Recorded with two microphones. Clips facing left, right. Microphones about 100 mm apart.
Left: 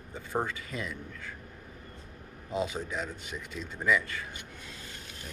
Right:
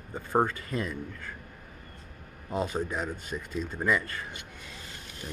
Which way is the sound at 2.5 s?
45° right (ahead or behind).